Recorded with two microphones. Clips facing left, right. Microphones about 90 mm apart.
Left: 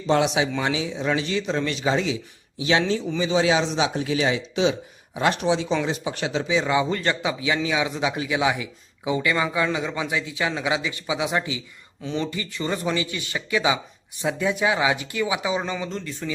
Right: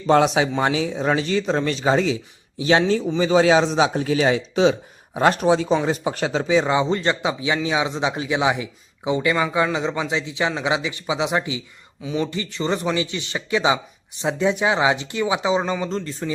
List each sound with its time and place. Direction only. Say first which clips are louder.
0.1 s a man's voice: right 4 dB; 40° right (ahead or behind); by 16.4 s 25° right (ahead or behind)